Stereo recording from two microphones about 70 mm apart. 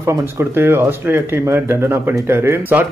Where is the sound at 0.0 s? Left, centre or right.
Right.